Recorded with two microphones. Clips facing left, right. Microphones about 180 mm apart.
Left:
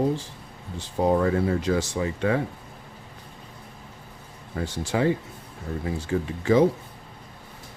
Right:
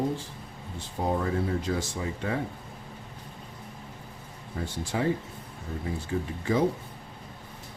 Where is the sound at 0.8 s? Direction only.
80° left.